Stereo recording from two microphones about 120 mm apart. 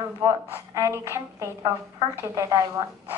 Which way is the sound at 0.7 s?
25° right (ahead or behind).